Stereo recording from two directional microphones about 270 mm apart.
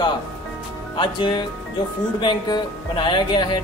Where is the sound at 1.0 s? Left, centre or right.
Centre.